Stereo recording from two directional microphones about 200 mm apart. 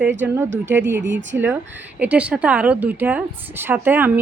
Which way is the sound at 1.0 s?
65° right (ahead or behind).